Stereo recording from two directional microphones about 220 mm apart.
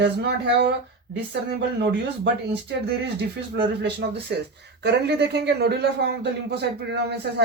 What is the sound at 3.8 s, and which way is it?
A man's voice, 50° right (ahead or behind).